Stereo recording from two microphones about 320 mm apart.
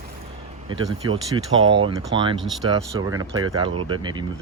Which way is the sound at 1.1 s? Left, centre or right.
Right.